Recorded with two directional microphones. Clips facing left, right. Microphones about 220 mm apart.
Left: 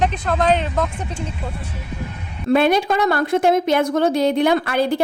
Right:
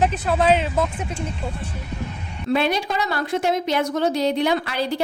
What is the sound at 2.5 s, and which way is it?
A woman's voice, 50° left (ahead or behind).